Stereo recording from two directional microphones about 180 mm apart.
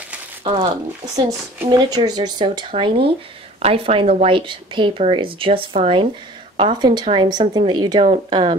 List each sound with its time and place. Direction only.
1.1 s speech: 20° right (ahead or behind)